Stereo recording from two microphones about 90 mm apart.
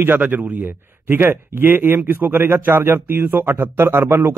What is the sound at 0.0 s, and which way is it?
Speech, 20° right (ahead or behind).